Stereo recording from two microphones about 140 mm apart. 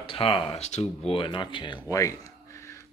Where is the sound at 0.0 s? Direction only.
40° left (ahead or behind).